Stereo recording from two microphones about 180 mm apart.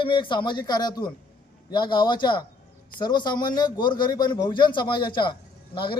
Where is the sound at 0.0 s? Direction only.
25° left (ahead or behind).